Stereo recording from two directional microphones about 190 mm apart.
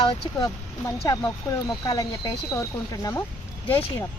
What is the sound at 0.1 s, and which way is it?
Speech, 20° left (ahead or behind).